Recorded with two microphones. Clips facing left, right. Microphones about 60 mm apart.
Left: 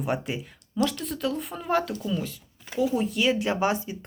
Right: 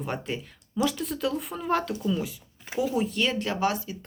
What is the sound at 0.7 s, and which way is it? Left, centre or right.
Speech, centre.